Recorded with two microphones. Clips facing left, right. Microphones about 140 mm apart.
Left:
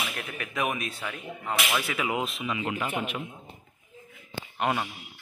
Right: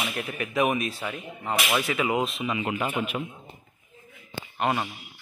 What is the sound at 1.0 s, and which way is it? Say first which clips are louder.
Speech: right 2 dB; 20° right (ahead or behind).